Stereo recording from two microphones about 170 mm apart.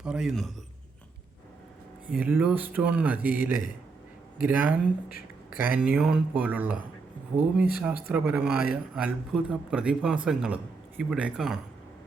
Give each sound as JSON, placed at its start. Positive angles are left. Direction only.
{"t": 0.0, "sound": "a man's voice", "side_deg": -5}
{"t": 2.0, "sound": "speech", "side_deg": -10}
{"t": 4.4, "sound": "speech", "side_deg": -10}
{"t": 5.0, "sound": "a sound", "side_deg": 60}
{"t": 5.6, "sound": "speech", "side_deg": -10}